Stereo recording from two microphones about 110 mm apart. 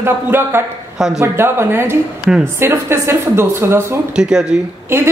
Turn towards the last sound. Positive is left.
turn(degrees=-20)  # may be behind; listen again after turning